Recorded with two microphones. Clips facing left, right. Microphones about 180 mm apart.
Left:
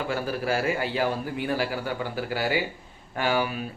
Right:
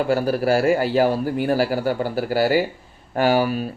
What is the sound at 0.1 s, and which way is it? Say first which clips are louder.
A man's voice: right 8 dB; 40° right (ahead or behind).